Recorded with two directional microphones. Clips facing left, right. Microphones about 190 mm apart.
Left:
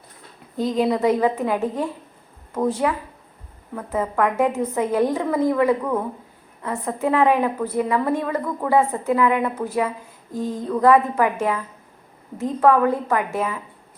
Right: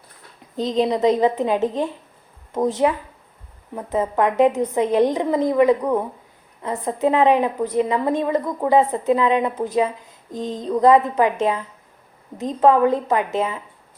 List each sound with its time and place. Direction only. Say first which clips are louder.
0.5 s a woman's voice: even; 20° right (ahead or behind)